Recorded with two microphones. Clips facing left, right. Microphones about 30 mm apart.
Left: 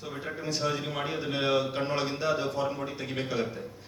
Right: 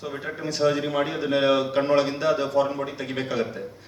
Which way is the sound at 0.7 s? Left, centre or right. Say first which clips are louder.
Right 7 dB; right.